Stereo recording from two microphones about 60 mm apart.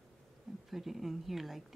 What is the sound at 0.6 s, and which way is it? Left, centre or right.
Speech, centre.